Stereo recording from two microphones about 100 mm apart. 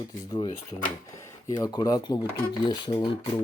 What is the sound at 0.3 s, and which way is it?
Speech, 40° left (ahead or behind).